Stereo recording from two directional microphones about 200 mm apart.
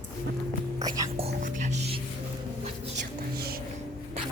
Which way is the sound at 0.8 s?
20° right (ahead or behind).